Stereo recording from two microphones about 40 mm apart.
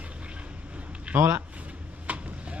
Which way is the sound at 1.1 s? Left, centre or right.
Right.